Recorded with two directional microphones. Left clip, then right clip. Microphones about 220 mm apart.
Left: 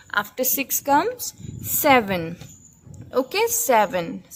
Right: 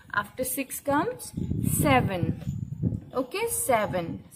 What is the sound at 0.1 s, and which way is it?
A woman's voice, 30° left (ahead or behind).